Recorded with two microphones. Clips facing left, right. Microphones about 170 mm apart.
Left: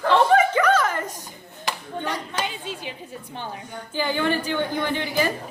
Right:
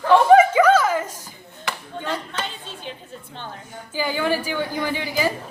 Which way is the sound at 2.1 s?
10° left (ahead or behind).